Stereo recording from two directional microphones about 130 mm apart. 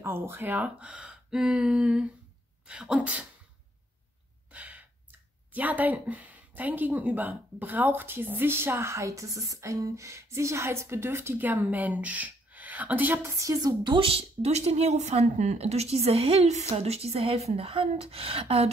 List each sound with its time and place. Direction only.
0.0 s speech: 20° right (ahead or behind)
4.5 s gasp: 10° right (ahead or behind)
5.5 s speech: 10° right (ahead or behind)
13.4 s a woman's voice: 30° right (ahead or behind); by 18.7 s 50° right (ahead or behind)